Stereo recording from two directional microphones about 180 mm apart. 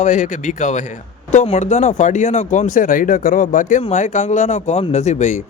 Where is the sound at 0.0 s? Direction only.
40° left (ahead or behind).